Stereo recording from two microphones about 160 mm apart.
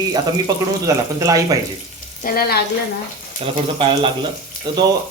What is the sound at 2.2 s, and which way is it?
Frying, 70° left (ahead or behind).